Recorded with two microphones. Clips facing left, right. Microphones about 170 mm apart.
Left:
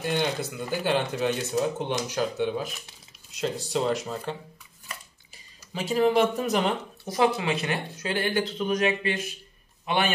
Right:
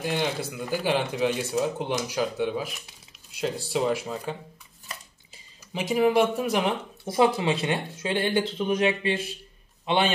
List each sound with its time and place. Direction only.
0.0 s speech: 5° right (ahead or behind)
4.8 s a sound: 20° right (ahead or behind)
7.1 s a man's voice: 25° right (ahead or behind)